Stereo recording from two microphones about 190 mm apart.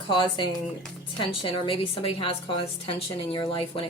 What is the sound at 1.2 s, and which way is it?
Speech, 30° left (ahead or behind).